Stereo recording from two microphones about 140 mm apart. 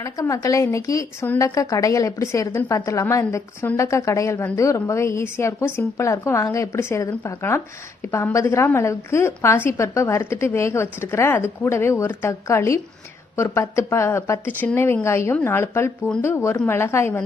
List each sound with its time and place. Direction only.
0.0 s a woman's voice: 25° left (ahead or behind)